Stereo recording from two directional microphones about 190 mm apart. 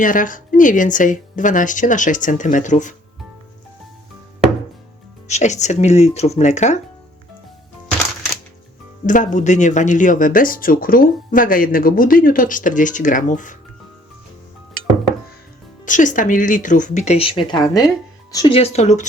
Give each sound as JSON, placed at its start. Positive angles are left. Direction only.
{"t": 0.0, "sound": "speech", "side_deg": 45}
{"t": 5.3, "sound": "speech", "side_deg": 35}
{"t": 9.0, "sound": "speech", "side_deg": 40}
{"t": 15.9, "sound": "speech", "side_deg": 40}